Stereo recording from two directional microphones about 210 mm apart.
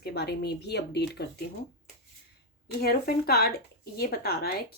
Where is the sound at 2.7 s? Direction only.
45° left (ahead or behind).